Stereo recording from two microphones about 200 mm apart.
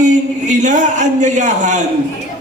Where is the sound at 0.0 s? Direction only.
40° right (ahead or behind).